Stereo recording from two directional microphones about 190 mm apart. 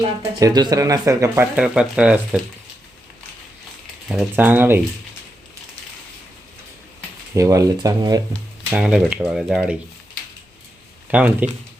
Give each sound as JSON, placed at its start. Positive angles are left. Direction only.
{"t": 0.3, "sound": "speech", "side_deg": -20}
{"t": 1.5, "sound": "speech", "side_deg": -5}
{"t": 4.1, "sound": "speech", "side_deg": -5}
{"t": 7.3, "sound": "speech", "side_deg": -15}
{"t": 8.7, "sound": "speech", "side_deg": -5}
{"t": 11.1, "sound": "speech", "side_deg": -5}